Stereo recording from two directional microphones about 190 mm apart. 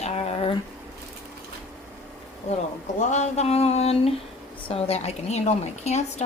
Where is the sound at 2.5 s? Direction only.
35° left (ahead or behind).